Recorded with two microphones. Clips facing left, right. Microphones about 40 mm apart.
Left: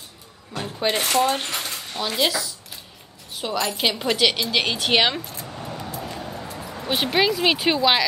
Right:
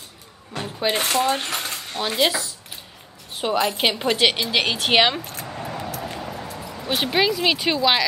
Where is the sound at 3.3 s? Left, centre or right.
Right.